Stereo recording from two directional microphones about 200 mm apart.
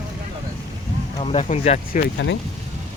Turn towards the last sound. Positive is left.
turn(degrees=60)  # may be behind; listen again after turning